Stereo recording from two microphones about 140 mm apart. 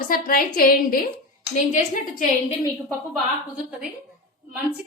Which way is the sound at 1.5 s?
65° left (ahead or behind).